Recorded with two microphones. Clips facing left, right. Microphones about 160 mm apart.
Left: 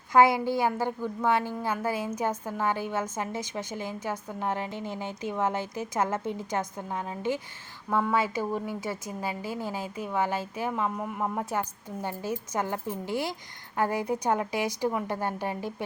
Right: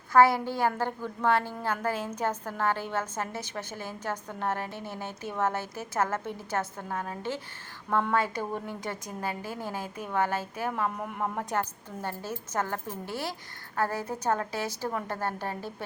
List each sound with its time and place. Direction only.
0.1 s a woman's voice: 15° left (ahead or behind)